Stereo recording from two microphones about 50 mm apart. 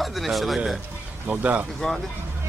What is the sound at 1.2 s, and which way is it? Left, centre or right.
Speech, right.